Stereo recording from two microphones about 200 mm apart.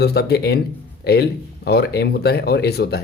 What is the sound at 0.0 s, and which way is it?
Speech, 55° left (ahead or behind).